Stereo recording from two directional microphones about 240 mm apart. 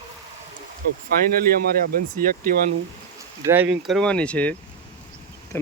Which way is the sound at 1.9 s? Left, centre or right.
Right.